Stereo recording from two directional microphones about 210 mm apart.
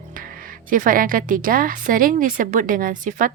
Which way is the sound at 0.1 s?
40° right (ahead or behind).